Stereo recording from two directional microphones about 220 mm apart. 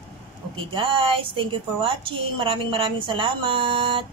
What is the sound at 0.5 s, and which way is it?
A woman's voice, 25° right (ahead or behind).